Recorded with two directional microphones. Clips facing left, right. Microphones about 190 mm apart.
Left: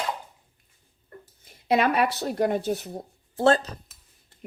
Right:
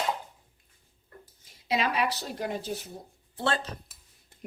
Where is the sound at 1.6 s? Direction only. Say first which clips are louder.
Left 6 dB; 55° left (ahead or behind).